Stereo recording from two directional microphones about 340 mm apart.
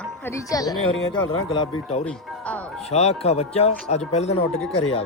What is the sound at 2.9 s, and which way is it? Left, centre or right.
A woman's voice, centre.